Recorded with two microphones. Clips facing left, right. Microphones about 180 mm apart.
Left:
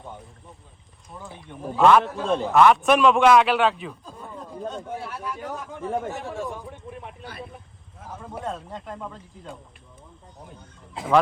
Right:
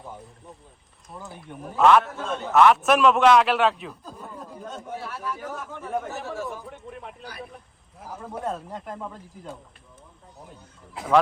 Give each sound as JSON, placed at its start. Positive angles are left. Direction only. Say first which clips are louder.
{"t": 1.1, "sound": "a man's voice", "louder": "right 1 dB", "side_deg": -5}
{"t": 2.0, "sound": "a man's voice", "louder": "left 6 dB", "side_deg": 30}
{"t": 2.4, "sound": "a man's voice", "louder": "even", "side_deg": 0}
{"t": 5.2, "sound": "speech", "louder": "even", "side_deg": 15}
{"t": 5.8, "sound": "speech", "louder": "left 2 dB", "side_deg": 30}
{"t": 6.3, "sound": "a man's voice", "louder": "left 1 dB", "side_deg": 0}
{"t": 7.3, "sound": "speech", "louder": "left 1 dB", "side_deg": 25}
{"t": 8.0, "sound": "a man's voice", "louder": "right 1 dB", "side_deg": -5}